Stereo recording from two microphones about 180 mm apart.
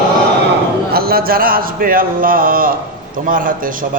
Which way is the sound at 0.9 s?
60° right (ahead or behind).